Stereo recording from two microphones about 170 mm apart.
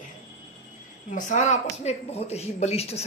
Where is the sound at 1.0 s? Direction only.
50° left (ahead or behind).